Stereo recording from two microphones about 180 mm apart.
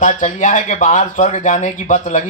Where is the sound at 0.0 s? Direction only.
45° left (ahead or behind).